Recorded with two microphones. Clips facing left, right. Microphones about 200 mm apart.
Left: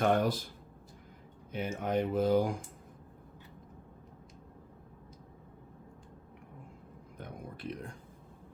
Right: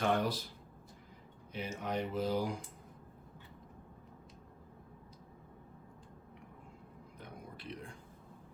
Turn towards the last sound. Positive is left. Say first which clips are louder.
# left 5 dB
turn(degrees=50)  # may be behind; listen again after turning